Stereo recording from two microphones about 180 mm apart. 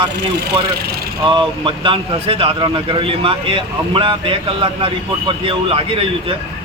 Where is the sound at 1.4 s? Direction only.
30° right (ahead or behind).